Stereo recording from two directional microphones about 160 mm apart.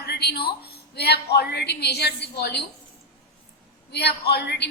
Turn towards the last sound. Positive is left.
turn(degrees=90)